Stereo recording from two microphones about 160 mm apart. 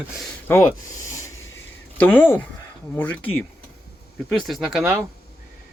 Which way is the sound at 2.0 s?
10° left (ahead or behind).